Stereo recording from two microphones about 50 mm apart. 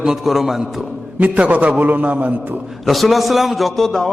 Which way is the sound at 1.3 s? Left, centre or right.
Right.